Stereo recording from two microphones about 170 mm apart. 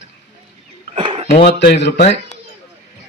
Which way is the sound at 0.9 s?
35° right (ahead or behind).